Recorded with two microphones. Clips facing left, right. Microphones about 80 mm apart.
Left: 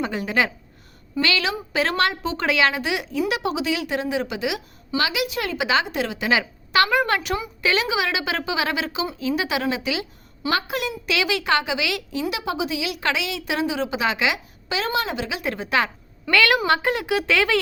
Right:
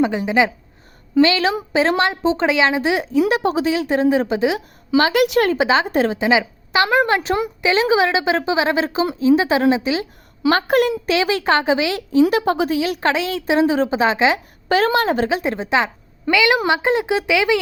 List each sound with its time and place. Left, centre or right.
0.0 s a woman's voice: right
1.2 s a woman's voice: right
6.7 s a woman's voice: right
10.5 s a woman's voice: right
11.1 s a woman's voice: right
12.3 s a woman's voice: right
14.7 s a woman's voice: right
17.2 s speech: centre